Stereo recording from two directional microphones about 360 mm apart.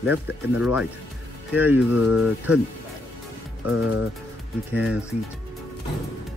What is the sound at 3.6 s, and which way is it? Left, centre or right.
Speech, left.